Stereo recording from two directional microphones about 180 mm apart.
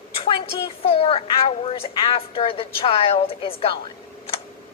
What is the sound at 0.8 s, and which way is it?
A woman's voice, 30° left (ahead or behind).